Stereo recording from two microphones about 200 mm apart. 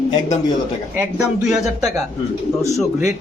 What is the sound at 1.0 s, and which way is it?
Speech, 5° right (ahead or behind).